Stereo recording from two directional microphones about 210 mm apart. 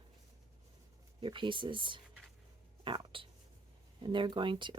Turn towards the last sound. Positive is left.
turn(degrees=-25)  # may be behind; listen again after turning